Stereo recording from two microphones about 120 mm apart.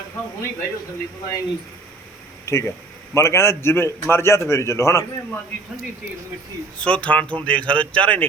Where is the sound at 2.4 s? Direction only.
25° left (ahead or behind).